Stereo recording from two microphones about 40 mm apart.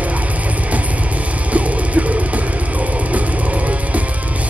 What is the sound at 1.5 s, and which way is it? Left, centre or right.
Music, right.